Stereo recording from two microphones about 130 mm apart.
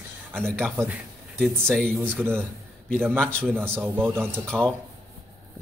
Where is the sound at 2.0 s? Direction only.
15° right (ahead or behind).